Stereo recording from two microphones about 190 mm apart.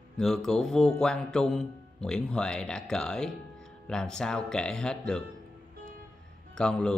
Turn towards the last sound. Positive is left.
turn(degrees=5)  # may be behind; listen again after turning